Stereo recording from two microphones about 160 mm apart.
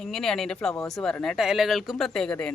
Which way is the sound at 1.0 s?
5° left (ahead or behind).